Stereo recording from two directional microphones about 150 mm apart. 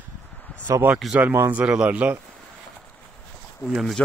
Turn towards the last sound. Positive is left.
turn(degrees=0)  # may be behind; listen again after turning